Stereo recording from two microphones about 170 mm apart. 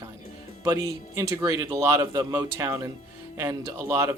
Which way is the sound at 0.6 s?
15° right (ahead or behind).